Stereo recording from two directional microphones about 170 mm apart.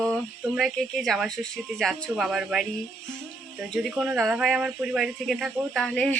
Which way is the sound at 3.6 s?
Centre (ahead or behind).